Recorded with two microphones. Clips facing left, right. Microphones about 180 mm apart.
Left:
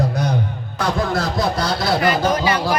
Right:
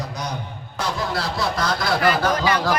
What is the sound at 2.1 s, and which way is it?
Speech, 15° left (ahead or behind).